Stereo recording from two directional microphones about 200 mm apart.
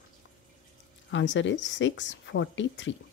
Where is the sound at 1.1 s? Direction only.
65° left (ahead or behind).